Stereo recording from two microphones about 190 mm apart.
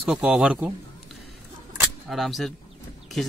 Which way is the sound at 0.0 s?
Centre (ahead or behind).